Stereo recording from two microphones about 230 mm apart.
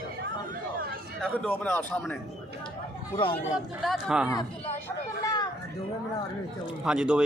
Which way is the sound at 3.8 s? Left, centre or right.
Centre.